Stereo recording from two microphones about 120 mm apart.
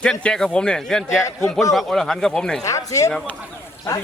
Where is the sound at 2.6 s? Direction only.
25° left (ahead or behind).